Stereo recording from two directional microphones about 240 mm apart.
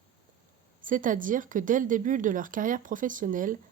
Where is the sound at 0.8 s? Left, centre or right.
Right.